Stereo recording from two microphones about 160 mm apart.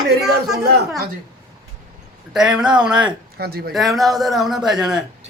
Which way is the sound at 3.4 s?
75° right (ahead or behind).